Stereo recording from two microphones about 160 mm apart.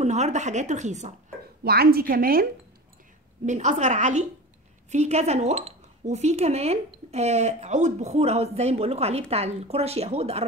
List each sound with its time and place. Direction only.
0.0 s a woman's voice: 45° right (ahead or behind)
1.6 s a woman's voice: 75° right (ahead or behind)
3.4 s a woman's voice: 50° right (ahead or behind)